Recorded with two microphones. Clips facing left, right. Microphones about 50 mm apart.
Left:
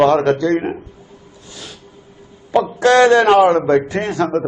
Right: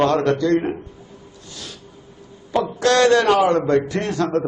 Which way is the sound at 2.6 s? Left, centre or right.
Centre.